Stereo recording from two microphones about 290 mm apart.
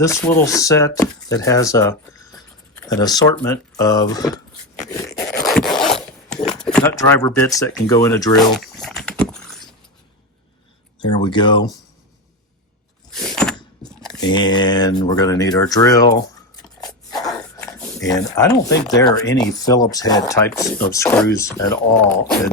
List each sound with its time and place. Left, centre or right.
0.0 s speech: centre
4.9 s a sound: centre
5.5 s zipper: centre
6.3 s speech: centre
8.5 s a sound: centre
11.0 s speech: centre
13.1 s door: centre
14.0 s speech: centre